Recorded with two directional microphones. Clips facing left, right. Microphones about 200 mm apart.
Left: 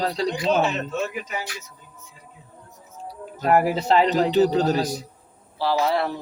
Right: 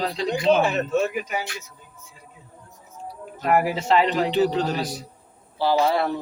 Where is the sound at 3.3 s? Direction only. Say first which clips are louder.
Left 2 dB; 35° left (ahead or behind).